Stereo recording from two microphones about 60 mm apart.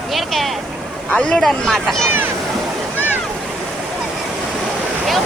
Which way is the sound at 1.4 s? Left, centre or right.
Centre.